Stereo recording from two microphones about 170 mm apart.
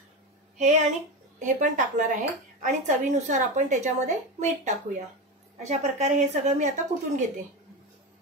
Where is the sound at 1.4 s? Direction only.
45° right (ahead or behind).